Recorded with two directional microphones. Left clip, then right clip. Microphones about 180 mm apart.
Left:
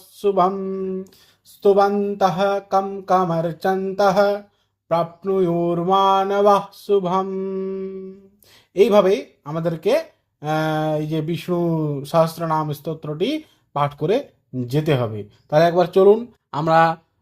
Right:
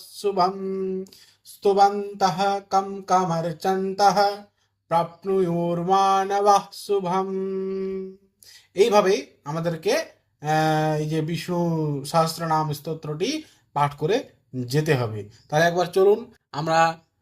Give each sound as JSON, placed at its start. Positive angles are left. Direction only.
{"t": 0.2, "sound": "mantra", "side_deg": 45}
{"t": 2.0, "sound": "mantra", "side_deg": 50}